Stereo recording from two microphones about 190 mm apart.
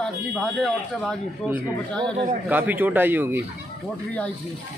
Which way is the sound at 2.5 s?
10° right (ahead or behind).